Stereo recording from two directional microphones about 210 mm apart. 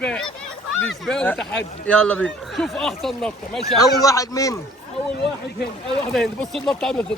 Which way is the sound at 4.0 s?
15° left (ahead or behind).